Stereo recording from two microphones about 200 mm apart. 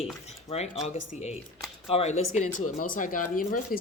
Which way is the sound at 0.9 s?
35° left (ahead or behind).